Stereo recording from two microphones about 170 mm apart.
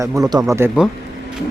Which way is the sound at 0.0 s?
20° right (ahead or behind).